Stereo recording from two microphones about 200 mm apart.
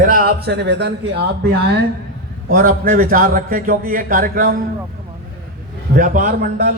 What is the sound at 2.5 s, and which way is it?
A man's voice, 45° right (ahead or behind).